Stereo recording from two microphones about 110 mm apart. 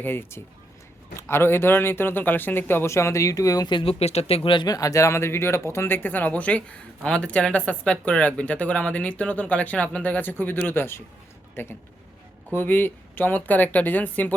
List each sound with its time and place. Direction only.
0.0 s a man's voice: 20° left (ahead or behind)
3.8 s speech: 65° left (ahead or behind)
4.7 s a man's voice: 30° left (ahead or behind); by 14.3 s 15° left (ahead or behind)